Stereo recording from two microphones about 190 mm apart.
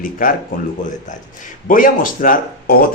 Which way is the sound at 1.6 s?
45° left (ahead or behind).